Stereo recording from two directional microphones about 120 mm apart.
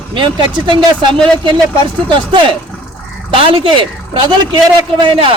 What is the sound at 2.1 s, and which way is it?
A man's voice, 40° right (ahead or behind).